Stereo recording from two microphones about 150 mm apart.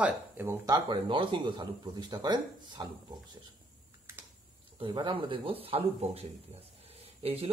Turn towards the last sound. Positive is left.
turn(degrees=-40)  # may be behind; listen again after turning